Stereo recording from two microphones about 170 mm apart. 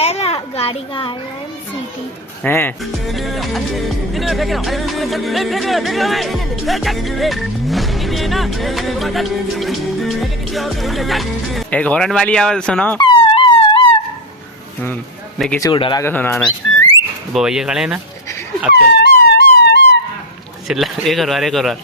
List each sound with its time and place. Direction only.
0.0 s a child's voice: 40° left (ahead or behind)
2.4 s speech: 10° left (ahead or behind)
3.1 s music: centre (ahead or behind)
13.0 s dog: 30° left (ahead or behind)
15.4 s speech: 5° left (ahead or behind)
15.6 s speech: 30° left (ahead or behind)
16.0 s speech: 10° left (ahead or behind)
17.3 s music: centre (ahead or behind)
18.7 s wail: 75° left (ahead or behind)
20.7 s music: centre (ahead or behind)